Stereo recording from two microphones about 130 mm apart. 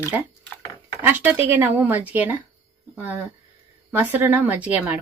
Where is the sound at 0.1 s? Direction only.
20° right (ahead or behind).